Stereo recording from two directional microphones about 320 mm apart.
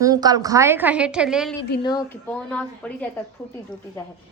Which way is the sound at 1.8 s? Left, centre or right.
Centre.